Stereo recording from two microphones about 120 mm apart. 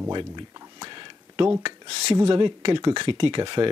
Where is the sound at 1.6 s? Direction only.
50° right (ahead or behind).